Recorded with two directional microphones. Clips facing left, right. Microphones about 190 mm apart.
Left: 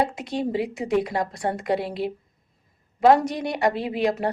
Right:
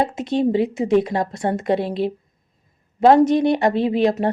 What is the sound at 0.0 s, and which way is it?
A woman's voice, 25° right (ahead or behind).